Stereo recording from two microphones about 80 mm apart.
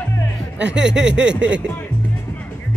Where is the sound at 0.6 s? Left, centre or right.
Centre.